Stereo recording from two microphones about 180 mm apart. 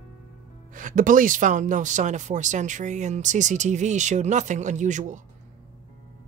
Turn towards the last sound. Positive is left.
turn(degrees=-45)  # may be behind; listen again after turning